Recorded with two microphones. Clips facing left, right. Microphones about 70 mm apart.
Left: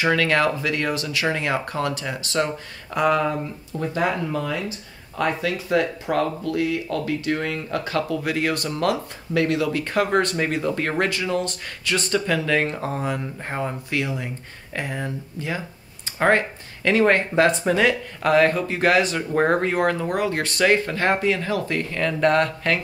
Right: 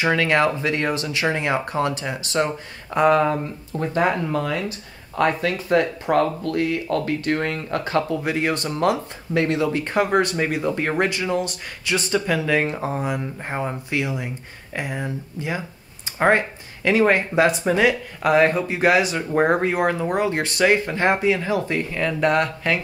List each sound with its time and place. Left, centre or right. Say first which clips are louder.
0.0 s speech: right 1 dB; centre
3.1 s speech: right 3 dB; right
4.5 s speech: right 2 dB; right; by 21.8 s centre
21.9 s speech: left 1 dB; centre